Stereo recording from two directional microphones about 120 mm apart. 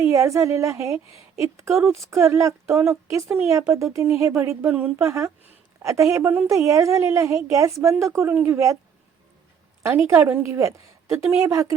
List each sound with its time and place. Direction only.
0.0 s a woman's voice: 25° right (ahead or behind)
9.8 s a woman's voice: 25° right (ahead or behind)